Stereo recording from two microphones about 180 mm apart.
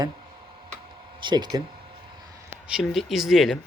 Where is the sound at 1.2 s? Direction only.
25° right (ahead or behind).